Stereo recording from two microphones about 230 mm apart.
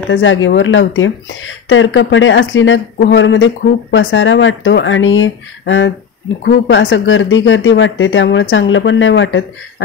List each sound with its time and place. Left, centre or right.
0.1 s speech: left